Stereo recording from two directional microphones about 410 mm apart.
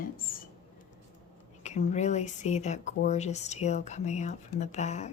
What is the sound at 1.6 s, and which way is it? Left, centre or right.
Speech, centre.